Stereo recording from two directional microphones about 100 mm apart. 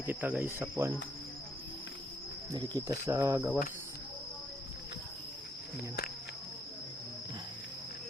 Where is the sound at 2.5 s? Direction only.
35° right (ahead or behind).